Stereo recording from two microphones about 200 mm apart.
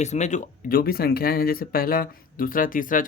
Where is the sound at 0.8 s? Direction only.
50° left (ahead or behind).